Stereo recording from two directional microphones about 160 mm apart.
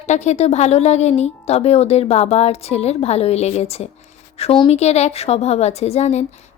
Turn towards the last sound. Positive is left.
turn(degrees=40)  # may be behind; listen again after turning